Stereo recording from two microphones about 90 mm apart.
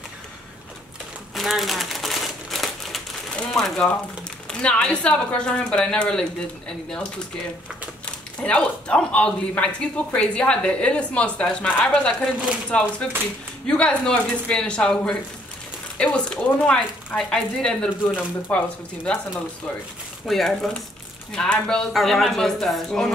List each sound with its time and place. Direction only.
1.3 s crumpling: centre (ahead or behind)
3.3 s a man's voice: 5° left (ahead or behind)
8.0 s a man's voice: 10° left (ahead or behind)
20.2 s a woman's voice: 5° left (ahead or behind)